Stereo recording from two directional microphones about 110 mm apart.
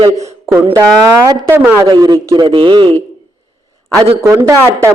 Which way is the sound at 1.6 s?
15° right (ahead or behind).